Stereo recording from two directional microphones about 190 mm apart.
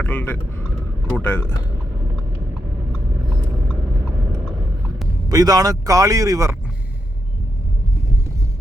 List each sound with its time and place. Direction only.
0.0 s a man's voice: 10° left (ahead or behind)
5.3 s speech: 20° right (ahead or behind)